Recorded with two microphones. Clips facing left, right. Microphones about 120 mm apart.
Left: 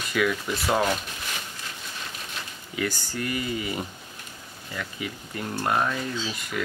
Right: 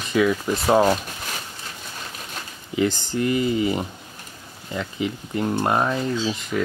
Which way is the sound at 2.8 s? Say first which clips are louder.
Right 8 dB; 20° right (ahead or behind).